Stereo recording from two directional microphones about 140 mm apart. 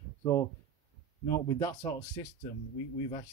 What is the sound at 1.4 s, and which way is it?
Speech, 25° left (ahead or behind).